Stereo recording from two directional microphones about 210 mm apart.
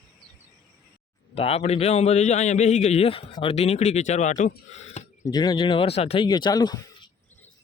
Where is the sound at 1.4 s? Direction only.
30° left (ahead or behind).